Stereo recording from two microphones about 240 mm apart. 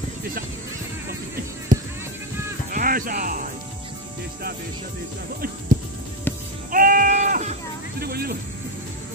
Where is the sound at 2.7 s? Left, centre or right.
Right.